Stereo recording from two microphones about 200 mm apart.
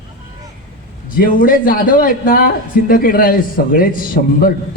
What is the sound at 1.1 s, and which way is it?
A man's voice, 45° left (ahead or behind).